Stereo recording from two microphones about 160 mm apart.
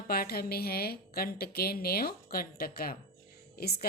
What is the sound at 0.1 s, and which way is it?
A woman's voice, 70° left (ahead or behind).